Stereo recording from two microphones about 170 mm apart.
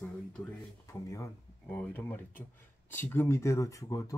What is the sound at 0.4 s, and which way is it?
Speech, 10° left (ahead or behind).